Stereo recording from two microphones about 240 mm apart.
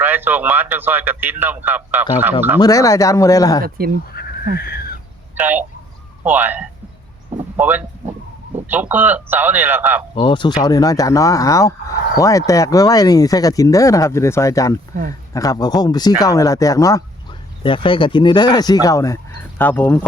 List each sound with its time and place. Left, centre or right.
0.0 s speech: centre
2.6 s speech: centre
3.6 s speech: right
4.1 s crow: left
5.4 s speech: centre
7.3 s a sound: centre
8.7 s speech: centre
10.2 s speech: left